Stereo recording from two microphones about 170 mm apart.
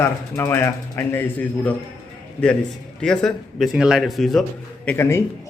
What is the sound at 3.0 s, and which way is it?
A man's voice, 5° left (ahead or behind).